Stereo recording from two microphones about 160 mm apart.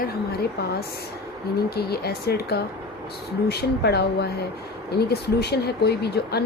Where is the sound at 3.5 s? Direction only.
90° left.